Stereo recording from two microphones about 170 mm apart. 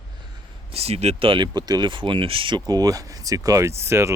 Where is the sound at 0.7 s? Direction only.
35° right (ahead or behind).